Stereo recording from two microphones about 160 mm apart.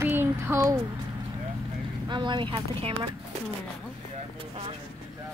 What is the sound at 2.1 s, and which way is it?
Speech, 30° right (ahead or behind).